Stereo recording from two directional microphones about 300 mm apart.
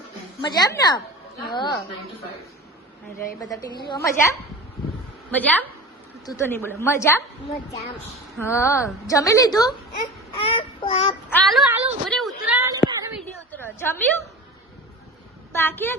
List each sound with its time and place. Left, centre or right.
0.4 s a woman's voice: centre
3.8 s a woman's voice: centre
6.2 s a woman's voice: centre
8.4 s a woman's voice: centre
10.3 s child singing: centre
11.3 s a woman's voice: centre
12.5 s a sound: centre
12.8 s a sound: centre
15.5 s a woman's voice: centre